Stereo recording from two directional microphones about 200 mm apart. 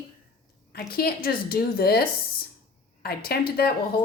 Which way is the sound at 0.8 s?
50° left (ahead or behind).